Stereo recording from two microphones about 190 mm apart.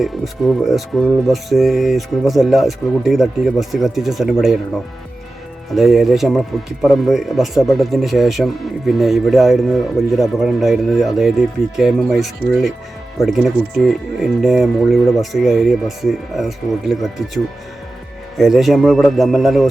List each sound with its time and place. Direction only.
0.0 s speech: centre (ahead or behind)
5.7 s speech: centre (ahead or behind)